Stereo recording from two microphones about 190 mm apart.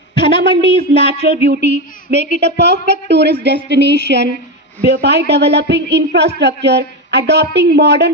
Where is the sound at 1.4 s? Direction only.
60° right (ahead or behind).